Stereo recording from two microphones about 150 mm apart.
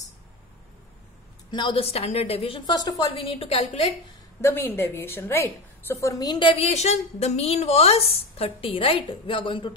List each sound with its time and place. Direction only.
1.5 s a woman's voice: 35° left (ahead or behind)
4.4 s a woman's voice: 15° left (ahead or behind)
6.5 s a woman's voice: 45° left (ahead or behind)